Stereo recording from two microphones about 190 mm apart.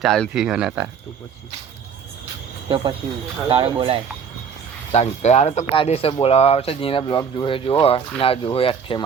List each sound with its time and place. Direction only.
0.0 s speech: centre (ahead or behind)
2.6 s speech: 25° right (ahead or behind)
4.9 s speech: 35° left (ahead or behind)